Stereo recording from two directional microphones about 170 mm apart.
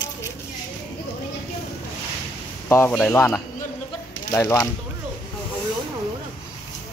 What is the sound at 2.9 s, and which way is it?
Speech, 5° left (ahead or behind).